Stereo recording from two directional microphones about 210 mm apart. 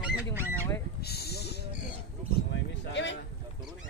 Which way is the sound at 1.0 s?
50° left (ahead or behind).